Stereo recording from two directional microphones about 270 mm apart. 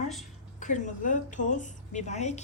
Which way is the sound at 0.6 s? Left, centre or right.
Left.